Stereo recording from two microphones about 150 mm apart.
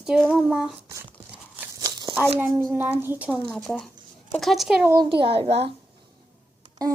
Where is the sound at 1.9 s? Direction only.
25° right (ahead or behind).